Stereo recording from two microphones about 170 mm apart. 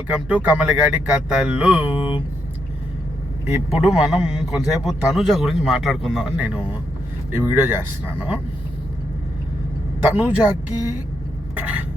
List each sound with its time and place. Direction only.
0.1 s speech: 5° right (ahead or behind)
2.0 s speech: 30° left (ahead or behind)
3.5 s speech: 5° right (ahead or behind)
10.0 s speech: 10° right (ahead or behind)
11.5 s speech: 10° right (ahead or behind)